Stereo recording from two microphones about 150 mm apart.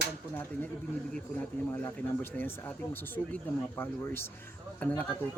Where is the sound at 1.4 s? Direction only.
15° left (ahead or behind).